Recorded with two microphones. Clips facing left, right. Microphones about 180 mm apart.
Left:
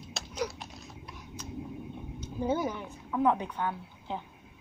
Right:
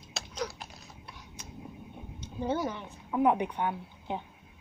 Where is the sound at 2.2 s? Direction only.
10° left (ahead or behind).